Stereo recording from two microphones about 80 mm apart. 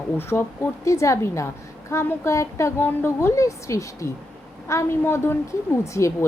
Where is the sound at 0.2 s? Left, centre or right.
Left.